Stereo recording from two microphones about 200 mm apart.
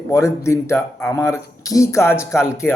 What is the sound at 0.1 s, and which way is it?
Speech, 15° left (ahead or behind).